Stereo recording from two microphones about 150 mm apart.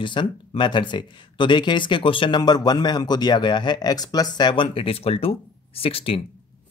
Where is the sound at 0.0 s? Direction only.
30° left (ahead or behind).